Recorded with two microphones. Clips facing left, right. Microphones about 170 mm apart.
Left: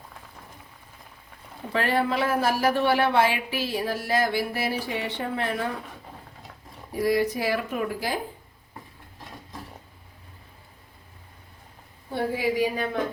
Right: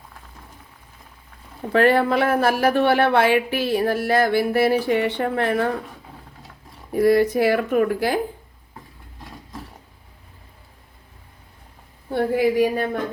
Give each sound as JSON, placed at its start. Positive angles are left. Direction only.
{"t": 1.7, "sound": "speech", "side_deg": -60}
{"t": 6.9, "sound": "speech", "side_deg": -55}
{"t": 12.1, "sound": "speech", "side_deg": -55}